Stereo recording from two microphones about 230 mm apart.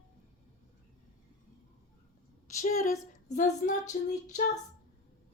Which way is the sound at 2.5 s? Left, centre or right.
Left.